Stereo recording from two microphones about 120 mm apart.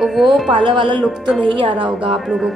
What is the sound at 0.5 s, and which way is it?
A woman's voice, 40° right (ahead or behind).